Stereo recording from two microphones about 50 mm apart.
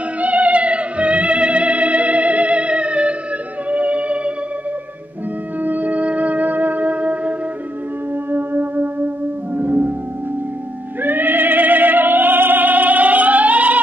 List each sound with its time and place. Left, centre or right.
0.2 s music: right
5.6 s music: right
8.3 s music: right
11.0 s opera: right